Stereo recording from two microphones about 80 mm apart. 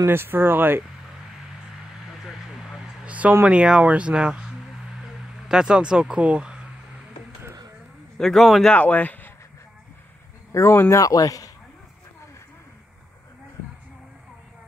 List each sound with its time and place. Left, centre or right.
0.0 s speech: right
2.1 s a sound: centre
3.1 s a sound: centre
3.4 s speech: centre
5.0 s a sound: centre
8.2 s speech: centre
8.7 s speech: centre
10.5 s speech: left
11.0 s speech: left